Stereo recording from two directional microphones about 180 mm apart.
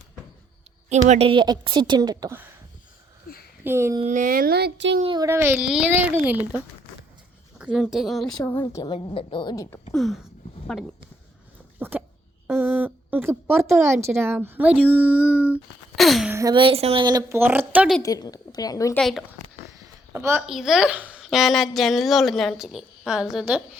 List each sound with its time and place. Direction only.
0.9 s a woman's voice: 40° right (ahead or behind); by 2.4 s 20° right (ahead or behind)
3.6 s a woman's voice: 15° right (ahead or behind)
4.0 s speech: 45° right (ahead or behind); by 4.9 s 75° right (ahead or behind)
5.1 s a woman's voice: 15° right (ahead or behind)
7.6 s a woman's voice: 5° right (ahead or behind)
8.4 s a woman's voice: 15° left (ahead or behind)
9.9 s a woman's voice: centre (ahead or behind)
11.8 s a sound: 10° right (ahead or behind)
12.5 s a woman's voice: 10° right (ahead or behind)
16.3 s a woman's voice: 20° right (ahead or behind)
18.0 s a woman's voice: 20° left (ahead or behind)
18.9 s a woman's voice: centre (ahead or behind)
20.1 s a woman's voice: 15° right (ahead or behind)
20.5 s a woman's voice: centre (ahead or behind)